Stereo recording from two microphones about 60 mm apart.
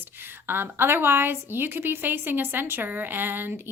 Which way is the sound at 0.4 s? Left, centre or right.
Right.